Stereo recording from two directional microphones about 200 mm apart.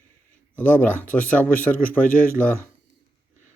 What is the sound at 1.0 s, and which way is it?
Speech, 10° left (ahead or behind).